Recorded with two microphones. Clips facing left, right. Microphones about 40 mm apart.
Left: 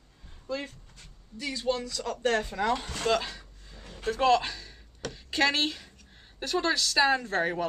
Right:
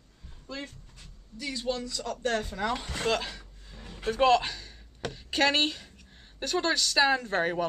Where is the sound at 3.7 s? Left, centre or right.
Centre.